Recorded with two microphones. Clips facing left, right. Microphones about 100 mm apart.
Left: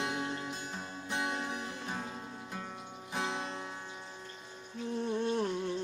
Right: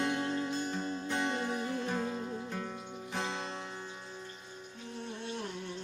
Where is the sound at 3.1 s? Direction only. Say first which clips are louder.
Left 1 dB; 15° left (ahead or behind).